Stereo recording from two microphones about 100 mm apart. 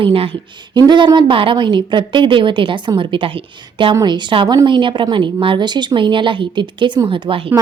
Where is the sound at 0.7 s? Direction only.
50° right (ahead or behind).